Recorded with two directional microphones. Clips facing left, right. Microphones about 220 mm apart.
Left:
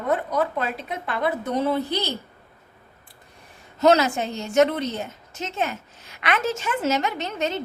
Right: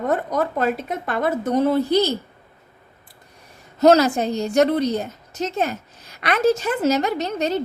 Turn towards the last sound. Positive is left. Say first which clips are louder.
# right 5 dB
turn(degrees=-40)  # may be behind; listen again after turning